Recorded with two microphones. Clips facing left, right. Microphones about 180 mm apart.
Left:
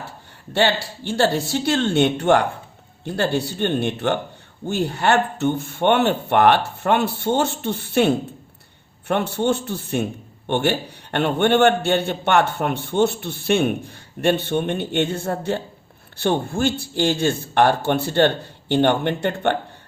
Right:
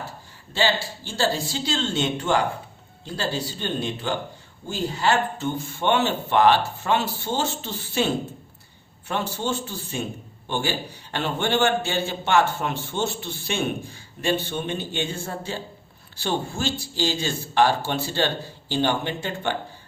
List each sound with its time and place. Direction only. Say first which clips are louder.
0.5 s a man's voice: left 4 dB; 65° left (ahead or behind)